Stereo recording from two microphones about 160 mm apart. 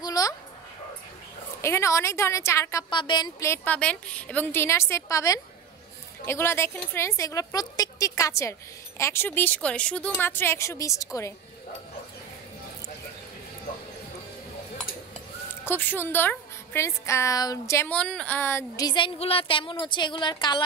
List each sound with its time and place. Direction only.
0.0 s dog: 25° left (ahead or behind)
1.6 s speech: 15° left (ahead or behind)
2.9 s speech: 30° left (ahead or behind)
15.6 s a woman's voice: 15° left (ahead or behind); by 20.6 s 30° left (ahead or behind)